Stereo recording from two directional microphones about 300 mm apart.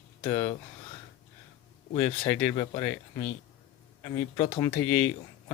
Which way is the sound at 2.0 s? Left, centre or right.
Centre.